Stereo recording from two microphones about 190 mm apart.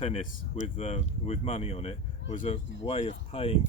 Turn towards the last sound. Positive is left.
turn(degrees=30)  # may be behind; listen again after turning